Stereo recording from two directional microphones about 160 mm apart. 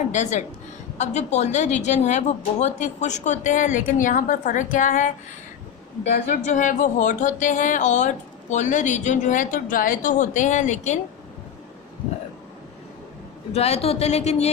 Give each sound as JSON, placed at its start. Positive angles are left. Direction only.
{"t": 0.1, "sound": "speech", "side_deg": 50}
{"t": 6.2, "sound": "speech", "side_deg": 45}
{"t": 13.5, "sound": "speech", "side_deg": 40}